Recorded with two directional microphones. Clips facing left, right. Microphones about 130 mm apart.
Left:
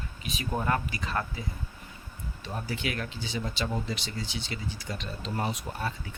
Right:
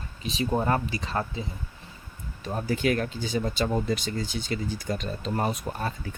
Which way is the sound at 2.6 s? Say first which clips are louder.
Right 9 dB; 45° right (ahead or behind).